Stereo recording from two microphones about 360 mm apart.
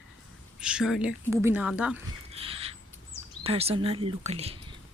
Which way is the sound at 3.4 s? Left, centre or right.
Centre.